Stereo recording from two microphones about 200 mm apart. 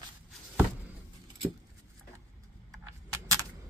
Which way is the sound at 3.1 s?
15° right (ahead or behind).